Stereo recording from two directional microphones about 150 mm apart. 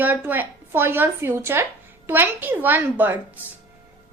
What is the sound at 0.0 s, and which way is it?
A woman's voice, 10° right (ahead or behind).